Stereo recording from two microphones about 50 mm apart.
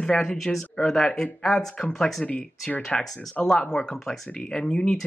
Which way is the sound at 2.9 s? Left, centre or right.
Centre.